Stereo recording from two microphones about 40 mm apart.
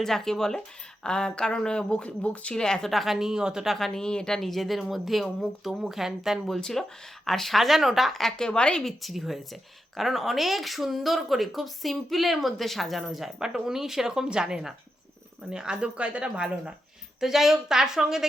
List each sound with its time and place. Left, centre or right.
0.0 s speech: centre; by 2.6 s left
2.6 s speech: centre
2.9 s a woman's voice: centre
3.8 s speech: centre
4.0 s speech: centre
4.4 s a woman's voice: centre
6.6 s speech: centre
8.4 s speech: left
8.8 s speech: centre; by 16.7 s right
17.2 s a woman's voice: centre